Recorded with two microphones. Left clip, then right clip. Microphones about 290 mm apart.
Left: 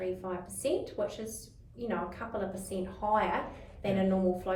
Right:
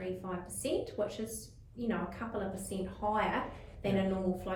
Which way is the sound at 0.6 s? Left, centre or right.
Centre.